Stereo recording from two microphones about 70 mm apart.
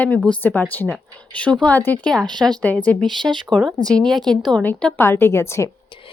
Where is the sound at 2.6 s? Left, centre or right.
Centre.